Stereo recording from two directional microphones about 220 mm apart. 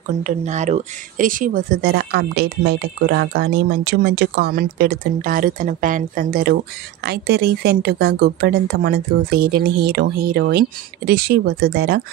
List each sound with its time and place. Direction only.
0.2 s speech: 35° right (ahead or behind)